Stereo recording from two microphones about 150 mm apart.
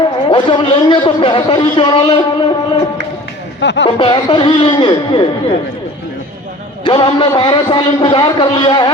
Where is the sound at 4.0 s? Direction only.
30° left (ahead or behind).